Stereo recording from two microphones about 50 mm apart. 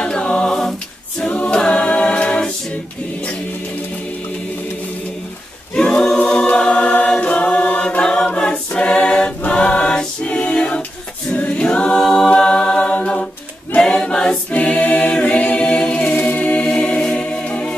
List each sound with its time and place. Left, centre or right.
0.0 s a capella: centre
1.3 s a capella: left
5.8 s choir: centre
11.3 s a capella: left
11.6 s a capella: centre
16.0 s music: left